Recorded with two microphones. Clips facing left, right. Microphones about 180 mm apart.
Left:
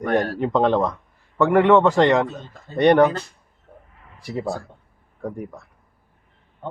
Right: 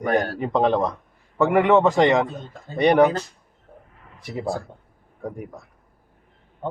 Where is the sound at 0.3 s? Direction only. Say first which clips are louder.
Left 1 dB; 5° right (ahead or behind).